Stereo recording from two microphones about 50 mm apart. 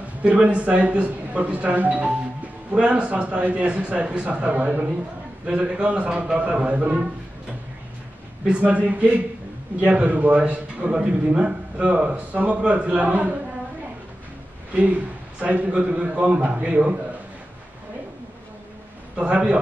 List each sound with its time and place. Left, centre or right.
0.2 s a man's voice: right
8.6 s a man's voice: right
14.8 s a man's voice: right
19.1 s a man's voice: right